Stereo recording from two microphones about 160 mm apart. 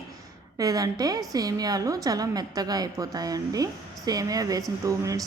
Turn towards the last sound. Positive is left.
turn(degrees=-20)  # may be behind; listen again after turning